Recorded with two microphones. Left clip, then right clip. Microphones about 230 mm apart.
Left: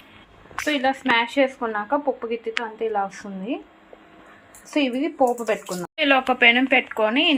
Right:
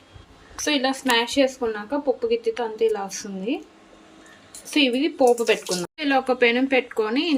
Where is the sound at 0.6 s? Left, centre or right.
Centre.